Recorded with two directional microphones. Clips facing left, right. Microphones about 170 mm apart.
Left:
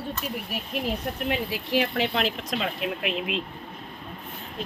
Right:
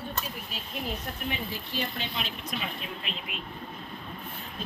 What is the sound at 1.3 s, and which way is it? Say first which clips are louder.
Speech: left 10 dB; 90° left.